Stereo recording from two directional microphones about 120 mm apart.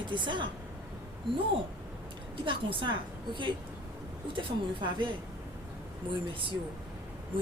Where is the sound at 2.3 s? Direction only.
45° right (ahead or behind).